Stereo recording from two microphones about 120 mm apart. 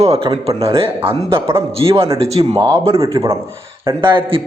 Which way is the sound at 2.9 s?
25° right (ahead or behind).